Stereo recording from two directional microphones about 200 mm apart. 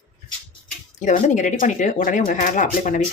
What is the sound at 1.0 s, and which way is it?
Speech, 40° left (ahead or behind).